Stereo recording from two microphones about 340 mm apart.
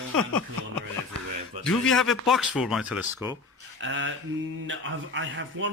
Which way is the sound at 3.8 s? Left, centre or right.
Right.